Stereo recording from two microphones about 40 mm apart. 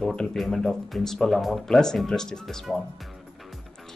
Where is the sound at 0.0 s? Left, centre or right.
Centre.